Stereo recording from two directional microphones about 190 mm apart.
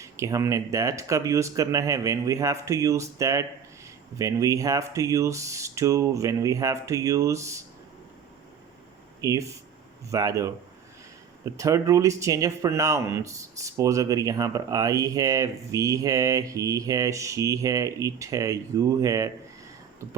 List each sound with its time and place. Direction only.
0.0 s speech: 15° right (ahead or behind)
9.2 s speech: 15° right (ahead or behind)